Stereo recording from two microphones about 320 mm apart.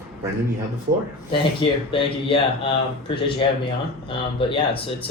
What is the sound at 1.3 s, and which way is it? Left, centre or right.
Speech, centre.